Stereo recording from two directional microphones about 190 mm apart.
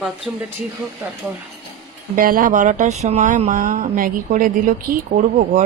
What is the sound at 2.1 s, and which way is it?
A woman's voice, 45° right (ahead or behind).